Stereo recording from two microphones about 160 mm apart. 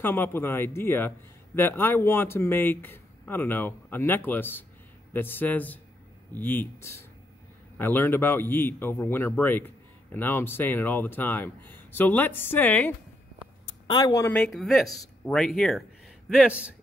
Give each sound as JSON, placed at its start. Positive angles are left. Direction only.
{"t": 0.0, "sound": "a man's voice", "side_deg": 15}
{"t": 13.8, "sound": "speech", "side_deg": 25}
{"t": 14.3, "sound": "speech", "side_deg": 0}